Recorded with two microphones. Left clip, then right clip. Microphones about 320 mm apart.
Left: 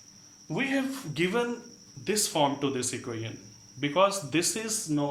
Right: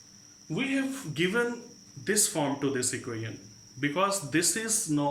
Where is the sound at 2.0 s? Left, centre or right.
Centre.